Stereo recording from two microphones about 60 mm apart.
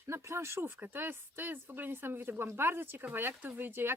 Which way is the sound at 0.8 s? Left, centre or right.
Right.